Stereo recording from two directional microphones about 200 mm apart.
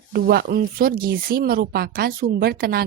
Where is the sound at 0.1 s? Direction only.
50° right (ahead or behind).